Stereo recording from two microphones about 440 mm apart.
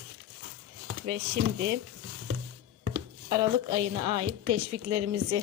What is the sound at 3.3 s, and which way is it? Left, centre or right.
A woman's voice, right.